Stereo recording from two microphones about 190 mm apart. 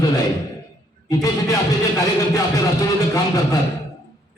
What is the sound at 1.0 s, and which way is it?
Speech, 20° left (ahead or behind).